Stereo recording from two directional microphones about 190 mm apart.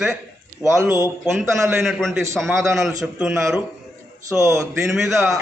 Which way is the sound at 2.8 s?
5° right (ahead or behind).